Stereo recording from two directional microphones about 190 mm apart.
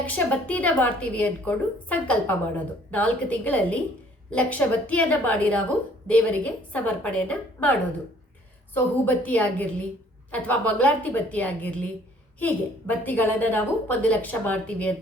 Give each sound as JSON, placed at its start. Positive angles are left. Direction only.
{"t": 0.0, "sound": "a woman's voice", "side_deg": 10}